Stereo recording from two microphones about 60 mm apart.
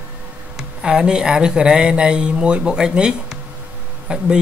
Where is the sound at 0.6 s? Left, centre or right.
Centre.